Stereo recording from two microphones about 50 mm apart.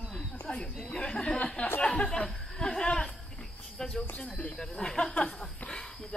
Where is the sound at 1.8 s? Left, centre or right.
Centre.